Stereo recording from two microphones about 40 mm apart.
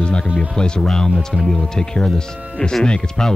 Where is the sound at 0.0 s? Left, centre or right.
Left.